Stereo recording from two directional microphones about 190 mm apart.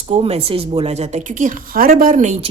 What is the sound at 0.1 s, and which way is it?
A woman's voice, 30° right (ahead or behind).